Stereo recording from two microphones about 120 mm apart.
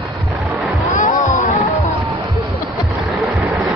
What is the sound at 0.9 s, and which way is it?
Music, 90° left.